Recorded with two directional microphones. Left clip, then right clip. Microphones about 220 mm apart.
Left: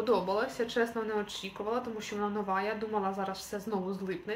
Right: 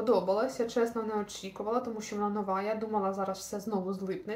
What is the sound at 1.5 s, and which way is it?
Speech, 20° left (ahead or behind).